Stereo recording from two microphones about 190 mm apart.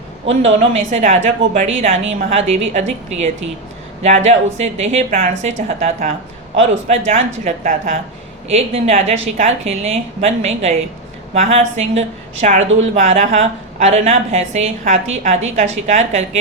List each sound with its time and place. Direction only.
0.3 s a woman's voice: 35° right (ahead or behind)